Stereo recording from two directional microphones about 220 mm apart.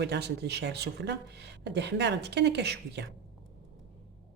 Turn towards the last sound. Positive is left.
turn(degrees=-50)  # may be behind; listen again after turning